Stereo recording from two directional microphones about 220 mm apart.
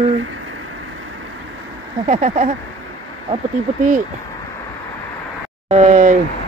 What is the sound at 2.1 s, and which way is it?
Speech, 35° right (ahead or behind).